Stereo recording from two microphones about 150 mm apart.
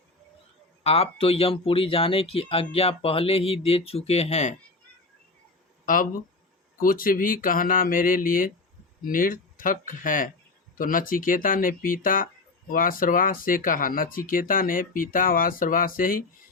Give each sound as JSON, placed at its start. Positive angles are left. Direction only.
{"t": 0.9, "sound": "speech", "side_deg": 40}
{"t": 5.8, "sound": "speech", "side_deg": 65}